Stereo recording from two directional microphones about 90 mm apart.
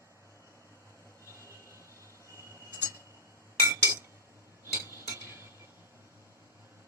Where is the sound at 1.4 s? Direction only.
30° right (ahead or behind).